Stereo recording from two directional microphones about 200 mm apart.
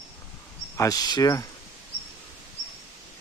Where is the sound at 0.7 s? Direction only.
15° left (ahead or behind).